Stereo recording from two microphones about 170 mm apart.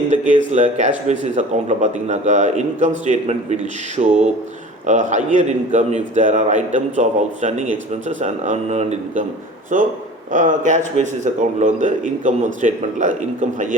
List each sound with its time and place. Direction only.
0.1 s a man's voice: 45° right (ahead or behind)